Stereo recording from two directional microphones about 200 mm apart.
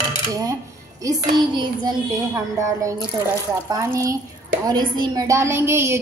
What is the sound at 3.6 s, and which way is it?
A woman's voice, 15° right (ahead or behind).